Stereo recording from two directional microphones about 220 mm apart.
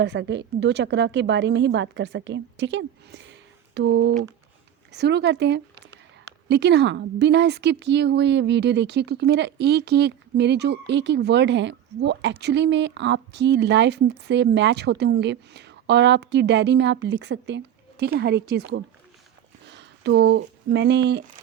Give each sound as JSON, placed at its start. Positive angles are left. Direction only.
{"t": 0.0, "sound": "a woman's voice", "side_deg": -55}